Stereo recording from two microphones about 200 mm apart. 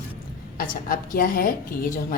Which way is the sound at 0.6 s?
45° left (ahead or behind).